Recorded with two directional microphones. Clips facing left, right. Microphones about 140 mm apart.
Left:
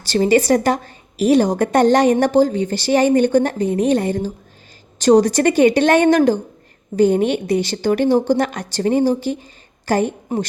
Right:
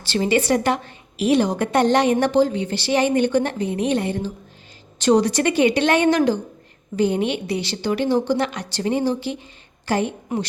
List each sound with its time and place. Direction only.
0.0 s a woman's voice: 40° left (ahead or behind)